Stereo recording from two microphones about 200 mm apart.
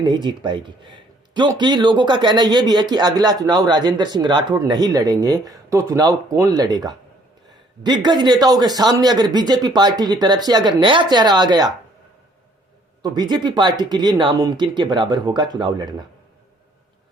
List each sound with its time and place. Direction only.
0.0 s speech: 25° right (ahead or behind)
13.0 s speech: 20° right (ahead or behind)